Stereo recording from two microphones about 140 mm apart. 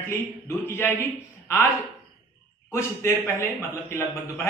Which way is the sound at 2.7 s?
20° left (ahead or behind).